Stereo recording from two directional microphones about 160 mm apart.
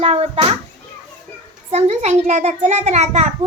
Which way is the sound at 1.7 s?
45° right (ahead or behind).